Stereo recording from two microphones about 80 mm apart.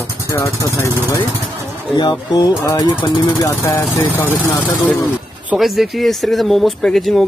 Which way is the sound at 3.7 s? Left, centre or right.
Left.